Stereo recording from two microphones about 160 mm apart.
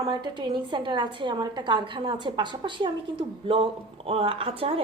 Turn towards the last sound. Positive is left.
turn(degrees=-35)  # may be behind; listen again after turning